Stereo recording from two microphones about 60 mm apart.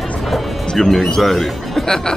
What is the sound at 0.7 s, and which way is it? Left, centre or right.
Speech, centre.